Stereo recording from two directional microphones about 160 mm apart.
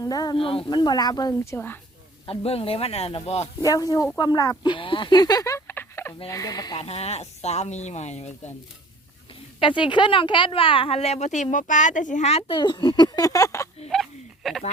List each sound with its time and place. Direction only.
0.0 s speech: 25° left (ahead or behind)
2.2 s speech: 35° left (ahead or behind)
3.6 s speech: 20° left (ahead or behind)
6.8 s speech: 40° left (ahead or behind)
9.6 s speech: 30° left (ahead or behind)
13.9 s a sound: centre (ahead or behind)